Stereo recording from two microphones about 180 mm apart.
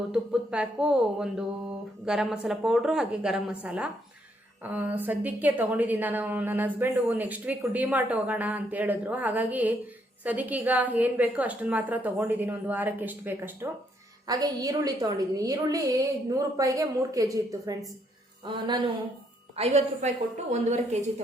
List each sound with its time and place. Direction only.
0.1 s a woman's voice: 5° right (ahead or behind); by 18.8 s 25° right (ahead or behind)
19.5 s a woman's voice: 35° right (ahead or behind)